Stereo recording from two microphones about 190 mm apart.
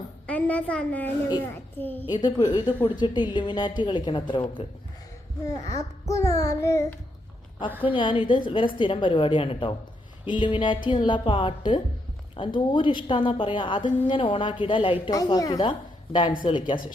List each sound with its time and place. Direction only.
0.3 s a woman's voice: 10° left (ahead or behind)
2.0 s a woman's voice: 20° left (ahead or behind)
7.9 s a woman's voice: 25° left (ahead or behind)